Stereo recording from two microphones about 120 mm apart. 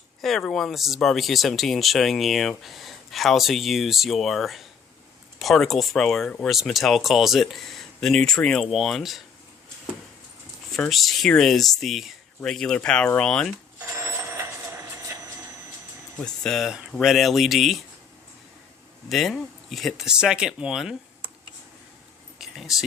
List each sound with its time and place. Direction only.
0.2 s speech: centre (ahead or behind)
10.8 s speech: centre (ahead or behind)
13.7 s vehicle: 25° right (ahead or behind)
16.2 s speech: 5° left (ahead or behind)
19.0 s speech: centre (ahead or behind)
22.4 s a sound: 5° right (ahead or behind)